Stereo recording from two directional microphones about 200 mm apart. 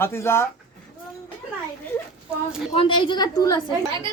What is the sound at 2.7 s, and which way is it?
Speech, 25° left (ahead or behind).